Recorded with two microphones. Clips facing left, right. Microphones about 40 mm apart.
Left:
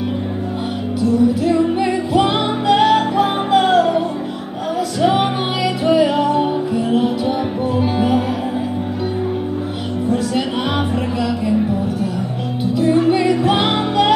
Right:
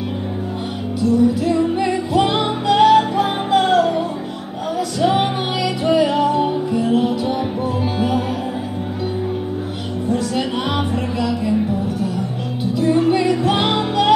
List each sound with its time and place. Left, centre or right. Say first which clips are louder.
1.4 s music: left 2 dB; centre
5.0 s music: left 1 dB; centre
11.1 s music: right 1 dB; centre
12.7 s music: left 1 dB; centre